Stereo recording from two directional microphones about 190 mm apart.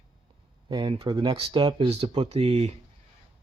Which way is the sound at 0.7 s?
25° right (ahead or behind).